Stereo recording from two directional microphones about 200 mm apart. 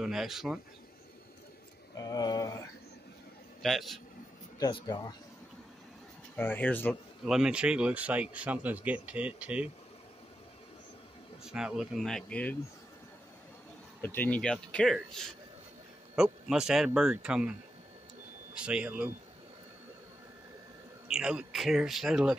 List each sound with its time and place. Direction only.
0.0 s speech: centre (ahead or behind)
2.0 s speech: 20° left (ahead or behind)
3.6 s speech: centre (ahead or behind)
4.6 s speech: 20° left (ahead or behind)
6.3 s speech: 10° left (ahead or behind)
7.2 s speech: 5° right (ahead or behind)
11.4 s speech: 5° right (ahead or behind)
14.0 s speech: 10° left (ahead or behind)
16.2 s speech: 5° right (ahead or behind)
21.1 s speech: 5° right (ahead or behind)